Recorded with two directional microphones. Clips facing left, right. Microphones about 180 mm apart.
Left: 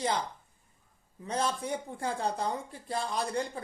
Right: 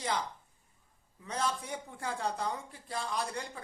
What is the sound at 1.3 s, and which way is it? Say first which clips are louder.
Speech: left 4 dB; 30° left (ahead or behind).